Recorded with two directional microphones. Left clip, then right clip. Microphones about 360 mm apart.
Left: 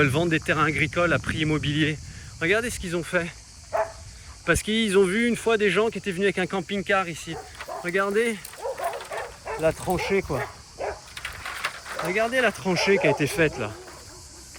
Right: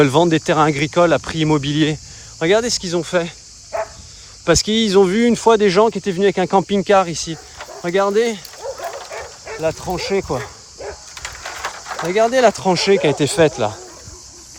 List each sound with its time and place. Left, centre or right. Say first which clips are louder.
0.0 s speech: right 9 dB; centre
3.7 s dog: right 2 dB; centre
4.4 s speech: right 8 dB; centre
9.6 s speech: right 3 dB; centre
11.2 s a sound: right 5 dB; centre
13.3 s speech: right 9 dB; centre